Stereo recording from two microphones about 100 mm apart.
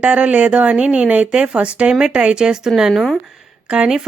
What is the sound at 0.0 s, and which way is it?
Speech, 10° right (ahead or behind).